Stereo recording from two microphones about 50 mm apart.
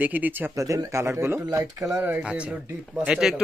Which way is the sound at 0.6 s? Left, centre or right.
Right.